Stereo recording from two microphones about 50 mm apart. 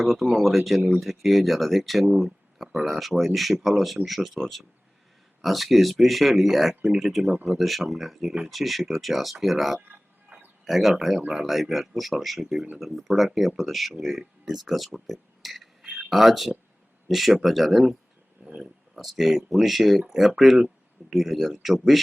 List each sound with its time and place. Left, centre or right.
0.0 s speech: centre
9.9 s a sound: right
10.7 s speech: centre